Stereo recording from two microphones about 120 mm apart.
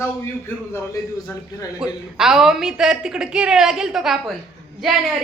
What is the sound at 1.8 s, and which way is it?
A woman's voice, 5° right (ahead or behind).